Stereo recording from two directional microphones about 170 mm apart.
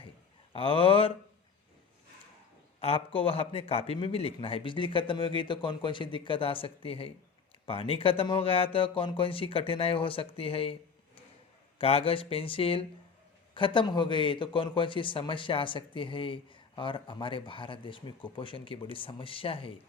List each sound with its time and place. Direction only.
0.5 s a man's voice: 30° left (ahead or behind)
2.8 s a man's voice: 35° left (ahead or behind)
11.8 s a man's voice: 35° left (ahead or behind)